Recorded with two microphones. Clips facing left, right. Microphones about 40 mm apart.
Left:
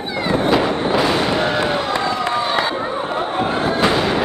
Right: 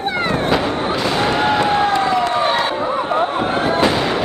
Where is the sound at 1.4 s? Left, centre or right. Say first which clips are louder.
Right 3 dB; centre.